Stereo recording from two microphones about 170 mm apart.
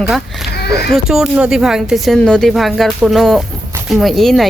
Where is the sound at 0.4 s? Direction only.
70° left (ahead or behind).